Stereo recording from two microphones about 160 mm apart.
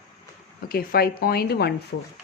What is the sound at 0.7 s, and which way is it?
Speech, 70° left (ahead or behind).